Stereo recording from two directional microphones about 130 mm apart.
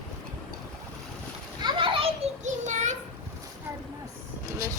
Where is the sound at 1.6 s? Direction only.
40° right (ahead or behind).